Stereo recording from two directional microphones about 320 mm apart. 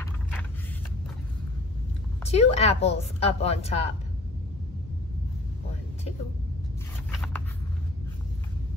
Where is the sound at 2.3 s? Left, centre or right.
Centre.